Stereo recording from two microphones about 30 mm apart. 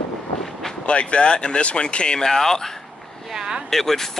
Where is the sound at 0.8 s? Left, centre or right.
Left.